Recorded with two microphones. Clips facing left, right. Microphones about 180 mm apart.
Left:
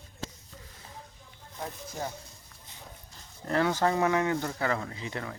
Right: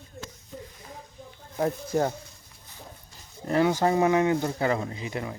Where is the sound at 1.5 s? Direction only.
65° right (ahead or behind).